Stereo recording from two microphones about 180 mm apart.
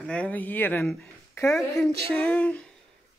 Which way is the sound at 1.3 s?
15° left (ahead or behind).